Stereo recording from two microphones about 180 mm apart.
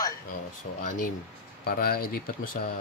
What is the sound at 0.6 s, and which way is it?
Speech, 60° left (ahead or behind).